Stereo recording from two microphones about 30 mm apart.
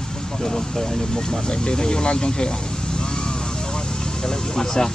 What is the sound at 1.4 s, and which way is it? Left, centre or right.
Speech, left.